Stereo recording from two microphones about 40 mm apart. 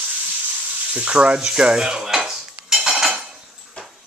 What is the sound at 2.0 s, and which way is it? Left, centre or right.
Cutlery, centre.